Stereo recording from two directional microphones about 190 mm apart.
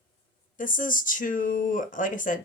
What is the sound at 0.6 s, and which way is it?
Speech, 45° left (ahead or behind).